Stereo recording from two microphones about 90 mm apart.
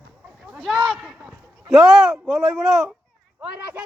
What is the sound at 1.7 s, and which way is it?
Speech, centre (ahead or behind).